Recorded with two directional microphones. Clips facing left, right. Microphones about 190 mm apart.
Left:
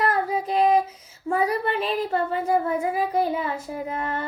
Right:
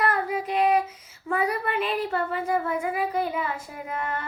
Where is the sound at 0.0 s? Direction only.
30° left (ahead or behind).